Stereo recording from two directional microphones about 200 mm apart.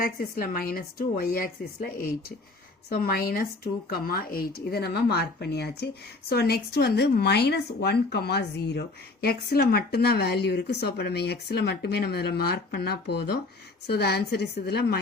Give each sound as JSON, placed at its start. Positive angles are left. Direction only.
{"t": 0.0, "sound": "speech", "side_deg": 45}